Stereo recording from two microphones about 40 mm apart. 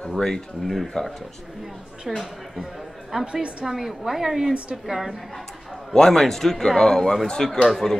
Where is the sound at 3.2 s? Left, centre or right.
Right.